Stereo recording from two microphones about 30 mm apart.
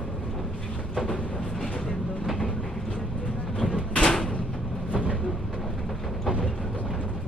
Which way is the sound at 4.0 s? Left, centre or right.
Centre.